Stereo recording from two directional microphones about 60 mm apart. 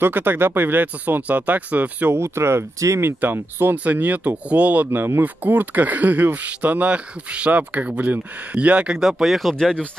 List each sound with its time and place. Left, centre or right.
0.0 s speech: right
2.1 s speech: right
3.7 s speech: right
4.9 s speech: right; by 9.8 s centre